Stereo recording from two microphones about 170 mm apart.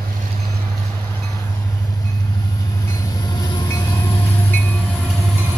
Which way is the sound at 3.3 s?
25° left (ahead or behind).